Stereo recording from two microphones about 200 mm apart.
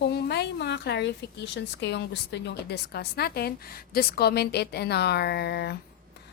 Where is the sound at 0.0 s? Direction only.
55° left (ahead or behind).